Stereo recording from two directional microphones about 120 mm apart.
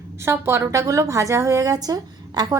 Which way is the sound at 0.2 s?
20° right (ahead or behind).